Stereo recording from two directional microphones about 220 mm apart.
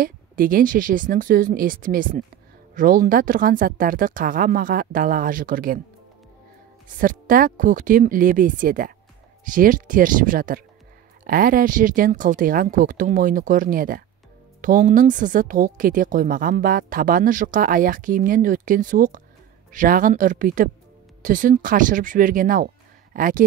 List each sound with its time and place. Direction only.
0.0 s speech: 40° right (ahead or behind)
7.0 s speech: 40° right (ahead or behind)